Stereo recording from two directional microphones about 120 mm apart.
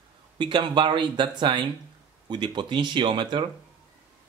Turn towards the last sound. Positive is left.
turn(degrees=-45)  # may be behind; listen again after turning